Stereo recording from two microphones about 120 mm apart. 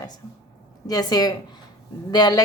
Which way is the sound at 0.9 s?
35° left (ahead or behind).